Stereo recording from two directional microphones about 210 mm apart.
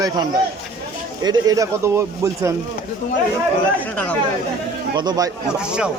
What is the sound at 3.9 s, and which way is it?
Speech, 5° left (ahead or behind).